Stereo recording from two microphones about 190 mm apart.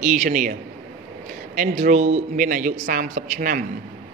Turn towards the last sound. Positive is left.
turn(degrees=-45)  # may be behind; listen again after turning